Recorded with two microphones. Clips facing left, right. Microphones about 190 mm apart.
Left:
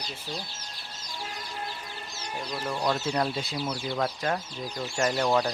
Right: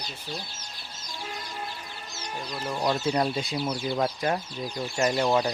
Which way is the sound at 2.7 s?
10° right (ahead or behind).